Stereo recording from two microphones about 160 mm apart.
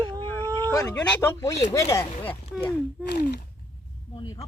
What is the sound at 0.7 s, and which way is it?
Speech, 20° left (ahead or behind).